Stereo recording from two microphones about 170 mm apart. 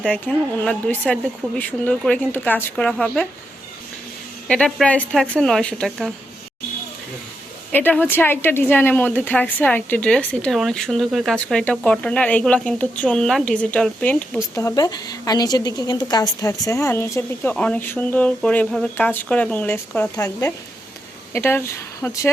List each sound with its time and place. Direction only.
0.1 s a woman's voice: 5° left (ahead or behind)
4.4 s speech: 5° left (ahead or behind)
7.7 s a woman's voice: 10° left (ahead or behind)
14.5 s a woman's voice: 20° left (ahead or behind)